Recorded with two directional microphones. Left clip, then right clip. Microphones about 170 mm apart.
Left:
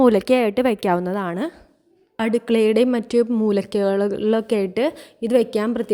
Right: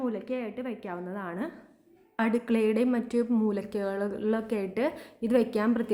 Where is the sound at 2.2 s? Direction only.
40° left (ahead or behind).